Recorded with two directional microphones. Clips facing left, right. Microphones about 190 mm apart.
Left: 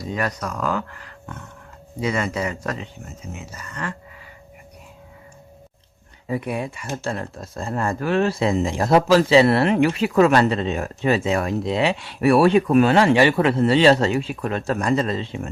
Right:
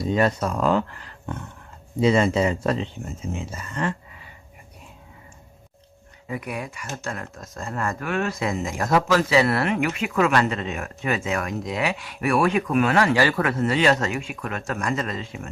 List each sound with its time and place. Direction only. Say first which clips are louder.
0.0 s speech: right 5 dB; 25° right (ahead or behind)
6.2 s speech: left 5 dB; 30° left (ahead or behind)